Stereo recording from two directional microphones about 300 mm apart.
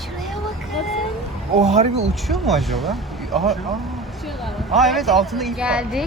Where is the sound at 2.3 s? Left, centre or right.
Centre.